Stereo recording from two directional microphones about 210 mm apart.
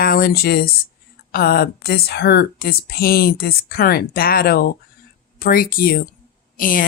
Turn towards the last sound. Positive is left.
turn(degrees=40)  # may be behind; listen again after turning